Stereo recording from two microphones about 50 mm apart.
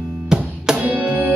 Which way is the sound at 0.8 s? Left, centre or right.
Right.